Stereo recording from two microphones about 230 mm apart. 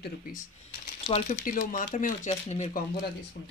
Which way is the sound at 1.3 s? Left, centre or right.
Left.